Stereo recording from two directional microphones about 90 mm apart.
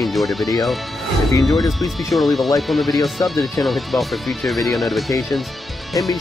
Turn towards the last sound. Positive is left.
turn(degrees=0)  # may be behind; listen again after turning